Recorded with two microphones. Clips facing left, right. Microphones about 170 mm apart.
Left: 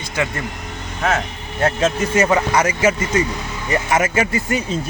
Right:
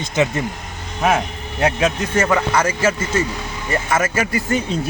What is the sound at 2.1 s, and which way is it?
Speech, 15° left (ahead or behind).